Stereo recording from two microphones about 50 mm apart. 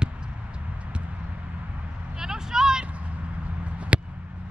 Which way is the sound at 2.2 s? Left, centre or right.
Centre.